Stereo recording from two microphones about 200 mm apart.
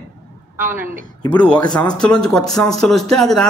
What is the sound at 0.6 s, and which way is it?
Speech, 10° right (ahead or behind).